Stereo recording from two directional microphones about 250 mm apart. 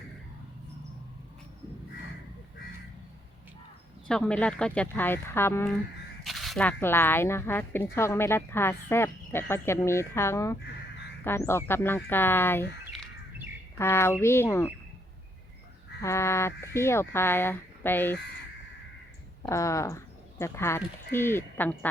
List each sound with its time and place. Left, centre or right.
4.1 s speech: centre
13.7 s speech: centre
16.0 s speech: centre
19.4 s speech: centre